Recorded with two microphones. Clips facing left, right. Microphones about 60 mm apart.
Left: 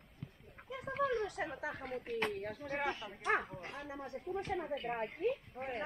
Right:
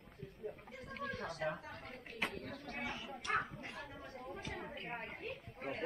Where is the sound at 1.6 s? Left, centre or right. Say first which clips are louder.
Left 8 dB; left.